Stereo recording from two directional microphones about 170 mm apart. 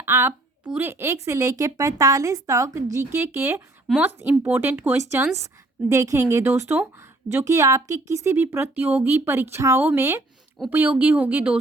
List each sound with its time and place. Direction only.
0.0 s a woman's voice: 15° right (ahead or behind)